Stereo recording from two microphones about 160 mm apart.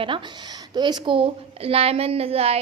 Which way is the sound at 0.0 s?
30° right (ahead or behind).